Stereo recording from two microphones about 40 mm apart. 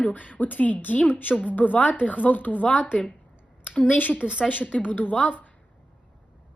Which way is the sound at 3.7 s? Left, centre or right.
Left.